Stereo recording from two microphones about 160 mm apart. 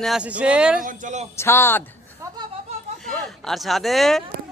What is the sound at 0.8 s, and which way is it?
Speech, 50° right (ahead or behind).